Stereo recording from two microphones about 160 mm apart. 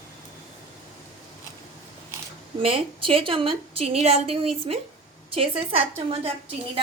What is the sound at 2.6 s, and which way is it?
A woman's voice, 35° right (ahead or behind).